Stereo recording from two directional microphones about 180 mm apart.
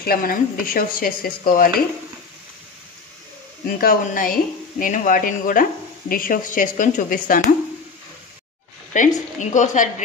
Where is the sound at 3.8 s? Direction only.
50° left (ahead or behind).